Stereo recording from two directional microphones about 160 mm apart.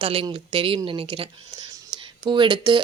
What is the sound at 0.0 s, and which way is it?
Speech, 35° right (ahead or behind).